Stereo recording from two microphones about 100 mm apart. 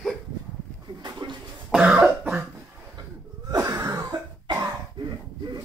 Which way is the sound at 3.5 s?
35° right (ahead or behind).